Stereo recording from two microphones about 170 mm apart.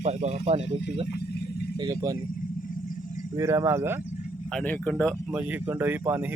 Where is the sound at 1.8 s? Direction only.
20° right (ahead or behind).